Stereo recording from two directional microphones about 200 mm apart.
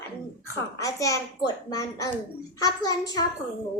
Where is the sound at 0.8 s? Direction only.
15° left (ahead or behind).